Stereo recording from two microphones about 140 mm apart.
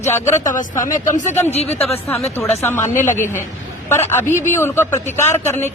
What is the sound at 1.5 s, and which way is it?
Speech, 50° left (ahead or behind).